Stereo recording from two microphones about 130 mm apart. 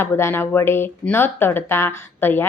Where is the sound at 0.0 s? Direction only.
20° left (ahead or behind).